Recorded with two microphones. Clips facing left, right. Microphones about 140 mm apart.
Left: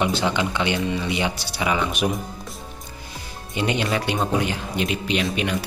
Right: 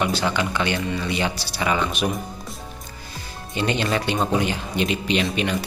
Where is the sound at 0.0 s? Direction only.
20° left (ahead or behind).